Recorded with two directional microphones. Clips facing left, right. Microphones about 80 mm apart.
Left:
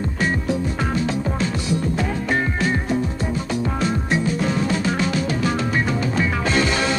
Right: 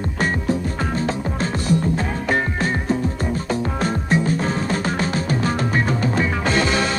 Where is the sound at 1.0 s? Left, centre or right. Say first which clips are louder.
Left 1 dB; right.